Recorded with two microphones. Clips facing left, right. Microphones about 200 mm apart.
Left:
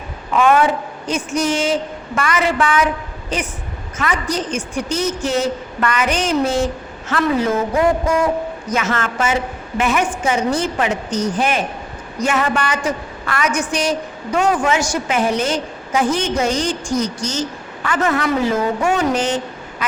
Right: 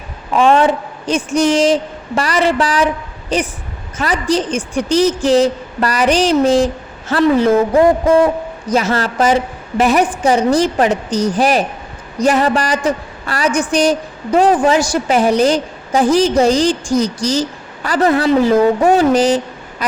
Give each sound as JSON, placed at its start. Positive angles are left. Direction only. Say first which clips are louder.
{"t": 0.3, "sound": "a woman's voice", "louder": "right 3 dB", "side_deg": -30}